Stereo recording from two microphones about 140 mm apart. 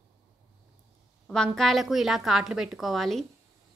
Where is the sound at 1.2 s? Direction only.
5° left (ahead or behind).